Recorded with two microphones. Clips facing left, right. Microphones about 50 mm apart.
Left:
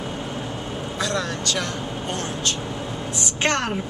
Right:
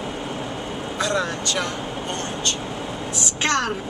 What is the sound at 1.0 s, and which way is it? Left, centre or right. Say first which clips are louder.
Speech: right 2 dB; centre.